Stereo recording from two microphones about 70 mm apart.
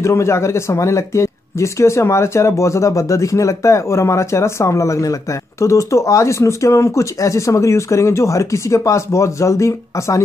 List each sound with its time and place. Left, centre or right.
0.0 s speech: left